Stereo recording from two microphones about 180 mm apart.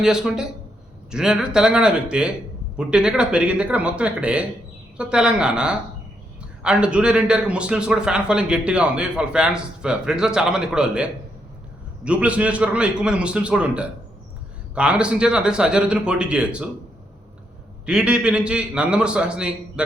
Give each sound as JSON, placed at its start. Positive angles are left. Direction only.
{"t": 0.0, "sound": "a man's voice", "side_deg": -5}
{"t": 17.8, "sound": "a man's voice", "side_deg": -5}